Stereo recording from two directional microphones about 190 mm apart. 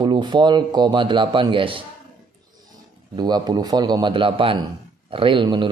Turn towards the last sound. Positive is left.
turn(degrees=-25)  # may be behind; listen again after turning